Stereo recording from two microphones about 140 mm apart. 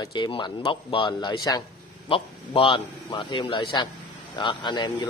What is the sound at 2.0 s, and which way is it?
A man's voice, 40° left (ahead or behind).